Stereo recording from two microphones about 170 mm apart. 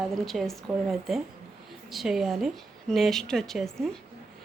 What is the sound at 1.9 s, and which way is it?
A woman's voice, centre (ahead or behind).